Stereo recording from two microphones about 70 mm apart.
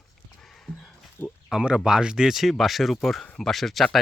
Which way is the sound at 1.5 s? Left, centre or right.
Centre.